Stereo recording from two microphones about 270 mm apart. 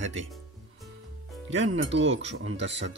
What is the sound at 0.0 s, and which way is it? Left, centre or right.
Speech, right.